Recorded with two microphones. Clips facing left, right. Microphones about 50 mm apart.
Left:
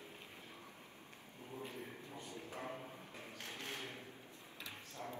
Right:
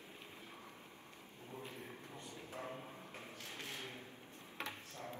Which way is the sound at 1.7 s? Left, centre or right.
Left.